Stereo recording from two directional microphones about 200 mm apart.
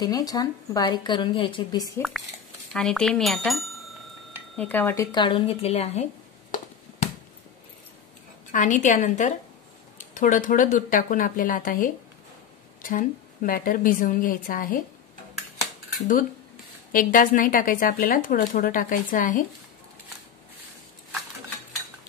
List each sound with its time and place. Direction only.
0.0 s a woman's voice: 20° left (ahead or behind)
2.0 s speech: centre (ahead or behind)
5.1 s a woman's voice: 25° left (ahead or behind)
8.5 s speech: 40° left (ahead or behind)
16.9 s speech: 45° left (ahead or behind)